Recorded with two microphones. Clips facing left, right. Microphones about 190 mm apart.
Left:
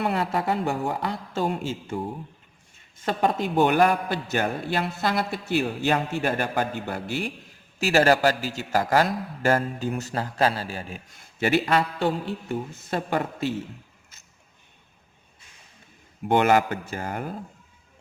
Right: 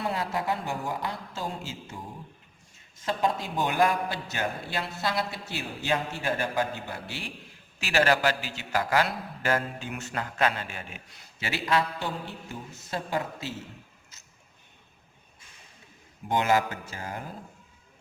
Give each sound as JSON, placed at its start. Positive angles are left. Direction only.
{"t": 0.0, "sound": "a man's voice", "side_deg": 65}
{"t": 16.3, "sound": "a man's voice", "side_deg": 60}